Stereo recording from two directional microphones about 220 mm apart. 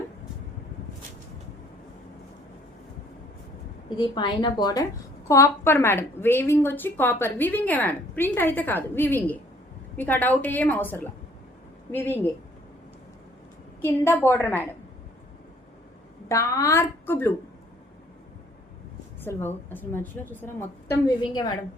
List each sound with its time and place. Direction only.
3.8 s a woman's voice: 20° left (ahead or behind)
13.8 s a woman's voice: 10° left (ahead or behind)
16.3 s a woman's voice: 15° left (ahead or behind)
19.2 s a woman's voice: 10° left (ahead or behind)